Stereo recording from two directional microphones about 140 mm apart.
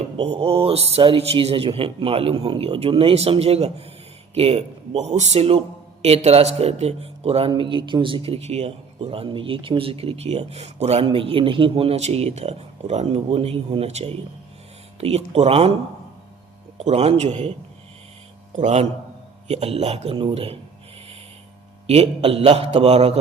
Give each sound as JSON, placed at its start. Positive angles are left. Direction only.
{"t": 0.2, "sound": "a man's voice", "side_deg": -45}
{"t": 11.0, "sound": "a man's voice", "side_deg": -40}
{"t": 16.7, "sound": "a man's voice", "side_deg": -50}
{"t": 18.5, "sound": "a man's voice", "side_deg": -55}
{"t": 21.8, "sound": "a man's voice", "side_deg": -45}